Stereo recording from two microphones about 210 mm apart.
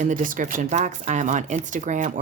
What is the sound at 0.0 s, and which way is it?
Speech, 40° right (ahead or behind).